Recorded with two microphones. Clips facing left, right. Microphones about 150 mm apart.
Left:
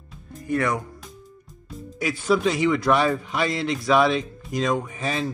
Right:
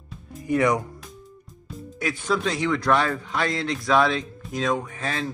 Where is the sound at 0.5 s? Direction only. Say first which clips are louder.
Right 3 dB; 15° right (ahead or behind).